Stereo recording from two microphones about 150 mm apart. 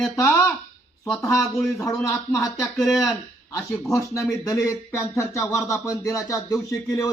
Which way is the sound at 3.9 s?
20° left (ahead or behind).